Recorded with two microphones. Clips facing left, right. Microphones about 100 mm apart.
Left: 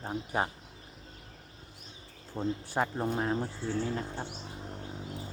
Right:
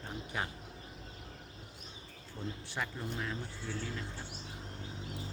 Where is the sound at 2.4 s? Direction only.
40° left (ahead or behind).